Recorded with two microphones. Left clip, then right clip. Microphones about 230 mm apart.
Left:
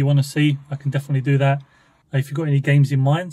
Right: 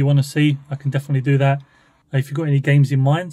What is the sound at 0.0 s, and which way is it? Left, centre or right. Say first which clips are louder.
Speech: right 1 dB; right.